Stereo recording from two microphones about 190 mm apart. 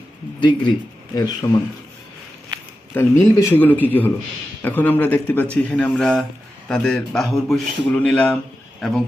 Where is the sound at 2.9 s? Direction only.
10° left (ahead or behind).